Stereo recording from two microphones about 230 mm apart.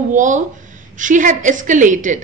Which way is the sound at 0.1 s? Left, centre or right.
Right.